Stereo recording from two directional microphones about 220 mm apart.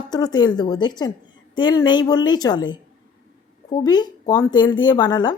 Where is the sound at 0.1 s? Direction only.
20° left (ahead or behind).